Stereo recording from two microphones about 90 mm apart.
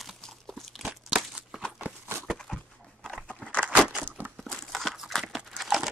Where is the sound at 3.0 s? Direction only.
5° left (ahead or behind).